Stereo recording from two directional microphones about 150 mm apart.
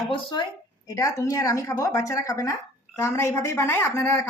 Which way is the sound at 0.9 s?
20° left (ahead or behind).